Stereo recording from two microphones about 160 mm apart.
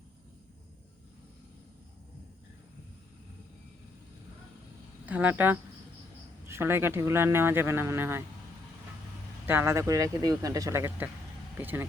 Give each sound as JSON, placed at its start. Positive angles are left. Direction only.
{"t": 5.0, "sound": "a man's voice", "side_deg": -10}
{"t": 9.5, "sound": "a man's voice", "side_deg": -15}